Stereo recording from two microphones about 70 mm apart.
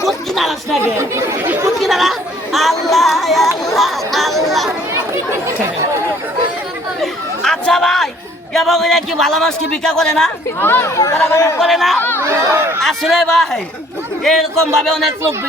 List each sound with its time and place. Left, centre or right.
0.0 s chatter: centre
0.8 s speech: right
1.8 s a man's voice: centre
7.0 s chatter: centre
8.5 s a man's voice: centre
10.6 s speech: left
10.8 s speech: left
11.6 s a man's voice: centre
11.9 s speech: left
12.2 s speech: right
12.8 s a man's voice: centre